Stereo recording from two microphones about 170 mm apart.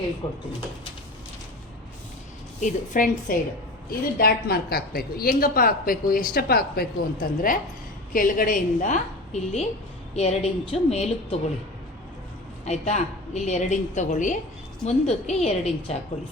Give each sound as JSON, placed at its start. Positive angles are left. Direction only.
{"t": 0.2, "sound": "speech", "side_deg": 25}
{"t": 2.6, "sound": "a woman's voice", "side_deg": 50}
{"t": 3.8, "sound": "a woman's voice", "side_deg": 65}
{"t": 12.6, "sound": "a woman's voice", "side_deg": 40}